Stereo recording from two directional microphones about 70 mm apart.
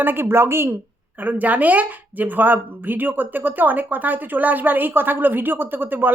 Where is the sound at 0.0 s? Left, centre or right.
Right.